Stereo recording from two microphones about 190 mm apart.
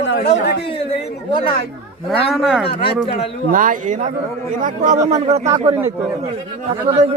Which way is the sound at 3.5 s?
45° right (ahead or behind).